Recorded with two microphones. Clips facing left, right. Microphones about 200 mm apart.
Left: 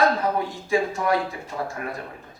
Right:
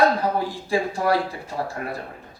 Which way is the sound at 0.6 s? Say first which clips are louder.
Even; 35° right (ahead or behind).